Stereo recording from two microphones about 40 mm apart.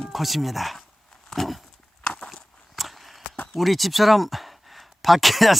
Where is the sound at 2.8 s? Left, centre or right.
Centre.